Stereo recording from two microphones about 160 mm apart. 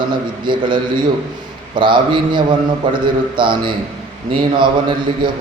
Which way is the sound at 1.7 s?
30° right (ahead or behind).